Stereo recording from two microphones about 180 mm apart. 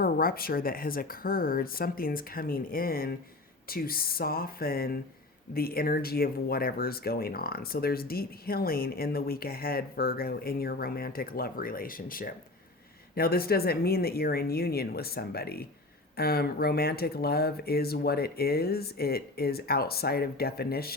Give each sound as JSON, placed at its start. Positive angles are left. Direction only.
{"t": 0.0, "sound": "speech", "side_deg": 55}